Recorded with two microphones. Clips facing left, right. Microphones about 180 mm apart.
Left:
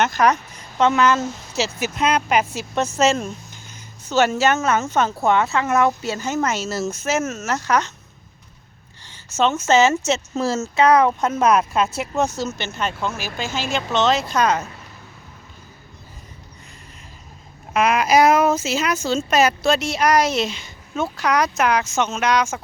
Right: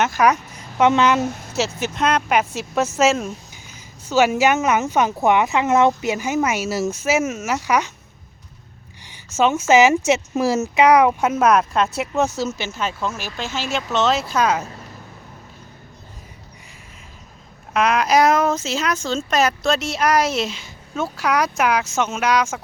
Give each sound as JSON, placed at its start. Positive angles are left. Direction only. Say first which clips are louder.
{"t": 0.0, "sound": "speech", "louder": "even", "side_deg": -10}
{"t": 1.5, "sound": "speech", "louder": "even", "side_deg": 0}
{"t": 9.0, "sound": "speech", "louder": "right 1 dB", "side_deg": -15}
{"t": 17.7, "sound": "speech", "louder": "left 1 dB", "side_deg": 5}